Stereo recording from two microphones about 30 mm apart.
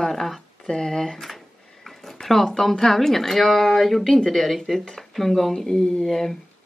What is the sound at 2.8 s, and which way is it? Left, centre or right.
A woman's voice, centre.